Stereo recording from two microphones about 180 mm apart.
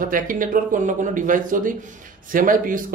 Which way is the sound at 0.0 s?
50° right (ahead or behind).